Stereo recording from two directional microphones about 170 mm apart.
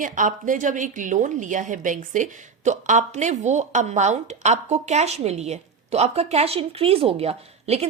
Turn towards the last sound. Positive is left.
turn(degrees=-40)  # may be behind; listen again after turning